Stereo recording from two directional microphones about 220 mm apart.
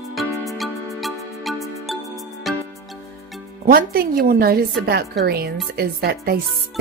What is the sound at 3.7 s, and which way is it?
Speech, 40° right (ahead or behind).